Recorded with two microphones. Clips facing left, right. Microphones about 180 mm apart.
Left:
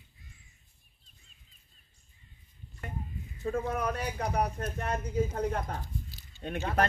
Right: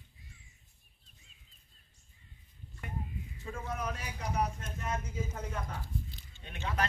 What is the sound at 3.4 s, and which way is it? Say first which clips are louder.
Speech: left 8 dB; 55° left (ahead or behind).